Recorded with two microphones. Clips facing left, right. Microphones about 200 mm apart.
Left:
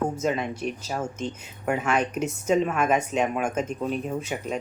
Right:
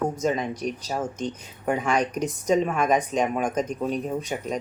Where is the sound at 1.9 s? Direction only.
35° right (ahead or behind).